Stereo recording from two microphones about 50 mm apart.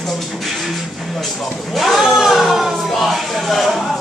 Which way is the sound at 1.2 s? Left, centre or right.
Centre.